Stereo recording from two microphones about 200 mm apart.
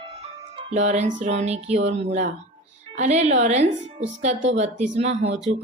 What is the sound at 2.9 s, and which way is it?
Speech, 35° right (ahead or behind).